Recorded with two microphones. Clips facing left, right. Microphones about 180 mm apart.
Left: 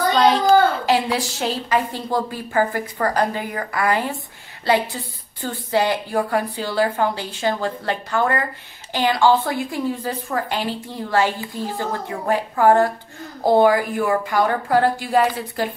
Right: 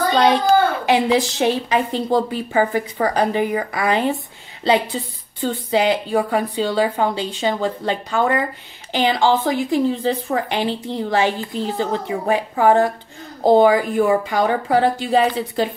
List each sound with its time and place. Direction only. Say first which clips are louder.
0.8 s a woman's voice: right 3 dB; 20° right (ahead or behind)